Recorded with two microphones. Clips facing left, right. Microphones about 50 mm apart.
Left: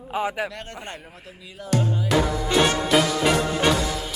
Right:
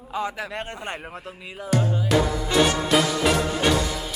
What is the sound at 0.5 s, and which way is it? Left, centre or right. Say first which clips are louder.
Speech: right 5 dB; right.